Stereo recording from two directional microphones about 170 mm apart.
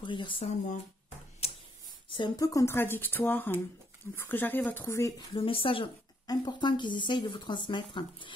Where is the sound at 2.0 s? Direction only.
25° left (ahead or behind).